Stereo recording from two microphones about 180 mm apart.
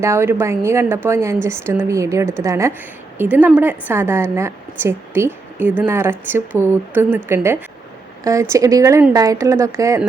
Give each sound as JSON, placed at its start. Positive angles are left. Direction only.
{"t": 0.0, "sound": "a woman's voice", "side_deg": -15}